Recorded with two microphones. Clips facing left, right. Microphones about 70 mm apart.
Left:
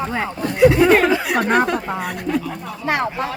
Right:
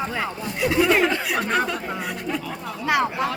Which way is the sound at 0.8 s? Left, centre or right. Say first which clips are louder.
Left 5 dB; left.